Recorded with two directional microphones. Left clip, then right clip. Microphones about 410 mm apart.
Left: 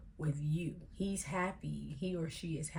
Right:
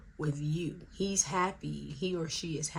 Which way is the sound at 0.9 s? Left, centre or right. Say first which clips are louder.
Right 8 dB; centre.